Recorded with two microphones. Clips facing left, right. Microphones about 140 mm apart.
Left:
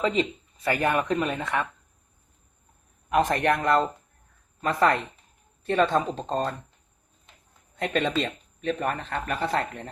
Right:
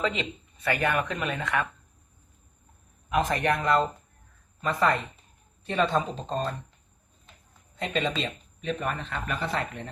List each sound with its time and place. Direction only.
0.0 s speech: 35° left (ahead or behind)
3.2 s speech: 50° left (ahead or behind)
7.8 s speech: 50° left (ahead or behind)